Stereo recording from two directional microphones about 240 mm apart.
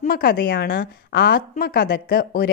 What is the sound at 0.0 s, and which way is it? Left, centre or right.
Speech, left.